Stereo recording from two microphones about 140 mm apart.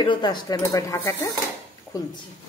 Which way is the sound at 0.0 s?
35° left (ahead or behind).